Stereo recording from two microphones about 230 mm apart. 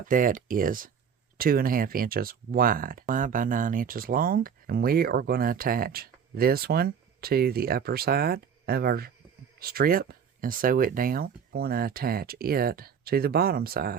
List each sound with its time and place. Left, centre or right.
0.0 s speech: right